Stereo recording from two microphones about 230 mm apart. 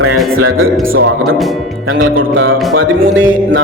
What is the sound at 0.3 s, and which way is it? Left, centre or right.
Music, right.